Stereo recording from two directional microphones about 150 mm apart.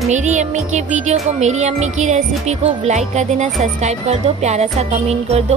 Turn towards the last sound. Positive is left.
turn(degrees=-45)  # may be behind; listen again after turning